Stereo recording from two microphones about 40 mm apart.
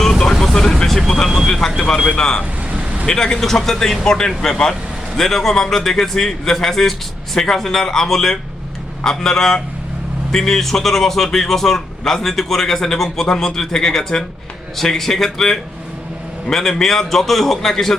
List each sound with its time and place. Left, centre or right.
0.0 s vehicle: centre
2.0 s a man's voice: centre
2.4 s vehicle: right
3.1 s a man's voice: centre